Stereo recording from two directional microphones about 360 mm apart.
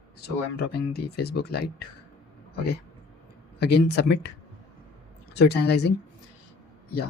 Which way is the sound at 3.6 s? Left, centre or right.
Left.